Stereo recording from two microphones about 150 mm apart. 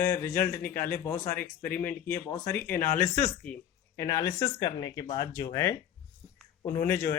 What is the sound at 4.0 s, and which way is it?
Speech, 25° left (ahead or behind).